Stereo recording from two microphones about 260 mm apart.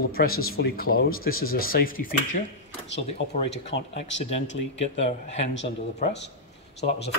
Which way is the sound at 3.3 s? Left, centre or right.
Left.